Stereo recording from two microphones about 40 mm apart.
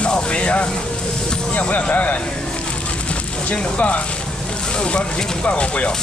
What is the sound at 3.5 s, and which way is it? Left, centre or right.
Speech, left.